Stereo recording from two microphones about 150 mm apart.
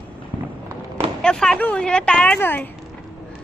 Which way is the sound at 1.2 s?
5° left (ahead or behind).